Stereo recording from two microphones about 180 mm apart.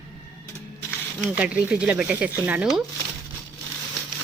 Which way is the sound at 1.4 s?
5° right (ahead or behind).